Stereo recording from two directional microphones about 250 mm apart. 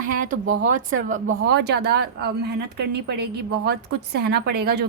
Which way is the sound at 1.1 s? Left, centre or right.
Right.